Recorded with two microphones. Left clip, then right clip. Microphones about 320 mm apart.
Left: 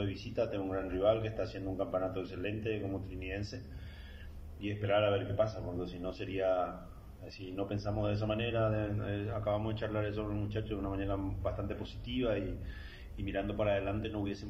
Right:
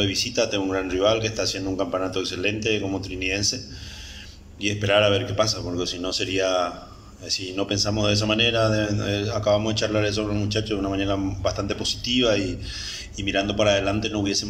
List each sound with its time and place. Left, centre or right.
0.0 s speech: right
4.6 s speech: right